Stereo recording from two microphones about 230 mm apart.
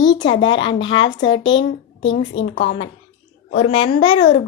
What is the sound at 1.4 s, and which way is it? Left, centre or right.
Speech, left.